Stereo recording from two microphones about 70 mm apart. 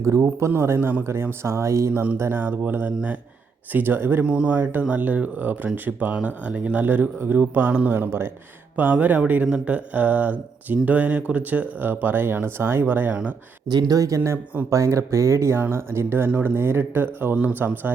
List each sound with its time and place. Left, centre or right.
0.0 s speech: right
1.9 s speech: right
2.1 s speech: right
2.4 s speech: right
4.2 s speech: centre
13.7 s speech: right